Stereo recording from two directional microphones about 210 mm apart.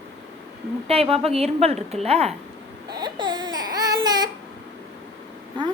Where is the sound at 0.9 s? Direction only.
30° right (ahead or behind).